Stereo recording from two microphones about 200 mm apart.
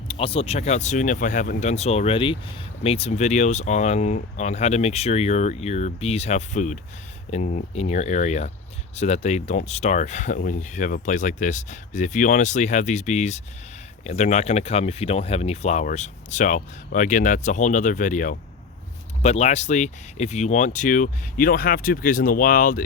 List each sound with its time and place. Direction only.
0.1 s speech: 30° left (ahead or behind); by 22.8 s 45° left (ahead or behind)